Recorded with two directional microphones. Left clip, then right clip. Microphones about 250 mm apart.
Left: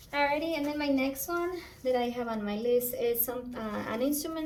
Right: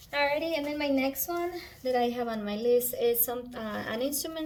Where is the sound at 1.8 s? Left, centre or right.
Centre.